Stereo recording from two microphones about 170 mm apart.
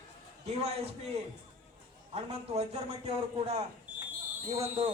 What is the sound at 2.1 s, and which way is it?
A man's voice, 40° right (ahead or behind).